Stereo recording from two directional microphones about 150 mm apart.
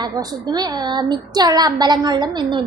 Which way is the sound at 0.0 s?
25° right (ahead or behind).